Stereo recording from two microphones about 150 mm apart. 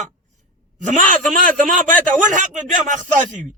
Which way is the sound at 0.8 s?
60° right (ahead or behind).